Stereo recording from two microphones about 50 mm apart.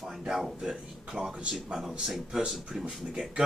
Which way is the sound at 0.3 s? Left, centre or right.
Centre.